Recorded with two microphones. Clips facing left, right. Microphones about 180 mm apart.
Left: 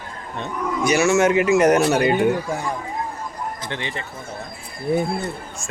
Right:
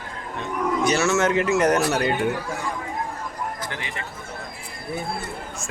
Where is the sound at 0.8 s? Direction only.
10° left (ahead or behind).